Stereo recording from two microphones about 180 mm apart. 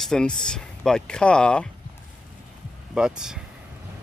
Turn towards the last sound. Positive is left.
turn(degrees=-5)  # may be behind; listen again after turning